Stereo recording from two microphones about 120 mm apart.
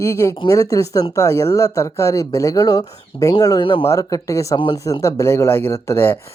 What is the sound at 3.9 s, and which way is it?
Speech, 30° left (ahead or behind).